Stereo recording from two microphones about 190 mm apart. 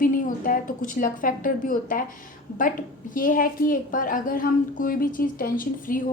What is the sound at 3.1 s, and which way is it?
A woman's voice, 45° left (ahead or behind).